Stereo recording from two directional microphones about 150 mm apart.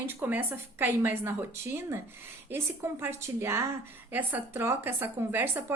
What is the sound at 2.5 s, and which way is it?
Speech, 15° right (ahead or behind).